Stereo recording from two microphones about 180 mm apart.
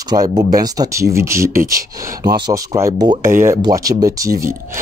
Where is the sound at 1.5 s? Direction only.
50° right (ahead or behind).